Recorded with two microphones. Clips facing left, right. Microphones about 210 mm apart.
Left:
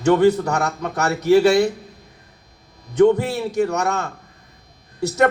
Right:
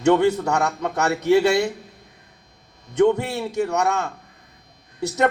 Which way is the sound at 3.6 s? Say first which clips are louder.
Left 1 dB; 40° left (ahead or behind).